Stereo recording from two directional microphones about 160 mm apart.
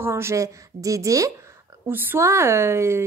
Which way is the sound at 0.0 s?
15° right (ahead or behind).